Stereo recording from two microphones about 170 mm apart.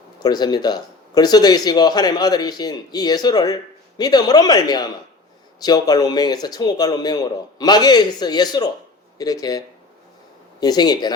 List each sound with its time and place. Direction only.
0.2 s speech: 25° left (ahead or behind)